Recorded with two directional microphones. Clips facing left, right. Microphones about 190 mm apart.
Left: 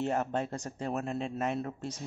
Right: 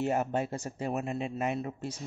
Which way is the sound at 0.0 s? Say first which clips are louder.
Right 2 dB; 10° right (ahead or behind).